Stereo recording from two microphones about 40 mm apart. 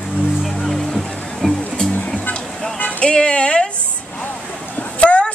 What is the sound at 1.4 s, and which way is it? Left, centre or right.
Music, centre.